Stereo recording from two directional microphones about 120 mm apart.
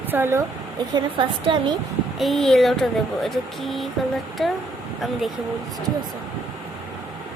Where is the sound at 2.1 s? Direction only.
Centre (ahead or behind).